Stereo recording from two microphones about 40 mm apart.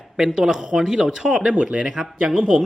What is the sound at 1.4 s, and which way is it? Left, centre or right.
Speech, right.